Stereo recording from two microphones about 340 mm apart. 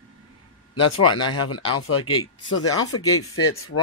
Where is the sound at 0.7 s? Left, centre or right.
Left.